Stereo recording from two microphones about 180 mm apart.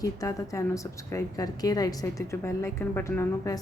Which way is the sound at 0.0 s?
20° left (ahead or behind).